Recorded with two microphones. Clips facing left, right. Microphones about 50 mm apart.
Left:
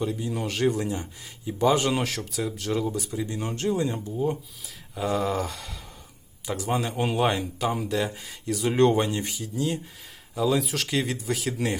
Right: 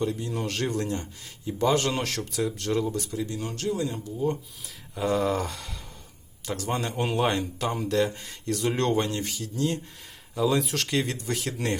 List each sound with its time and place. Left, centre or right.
0.0 s a man's voice: centre
3.2 s speech: left
4.6 s a man's voice: centre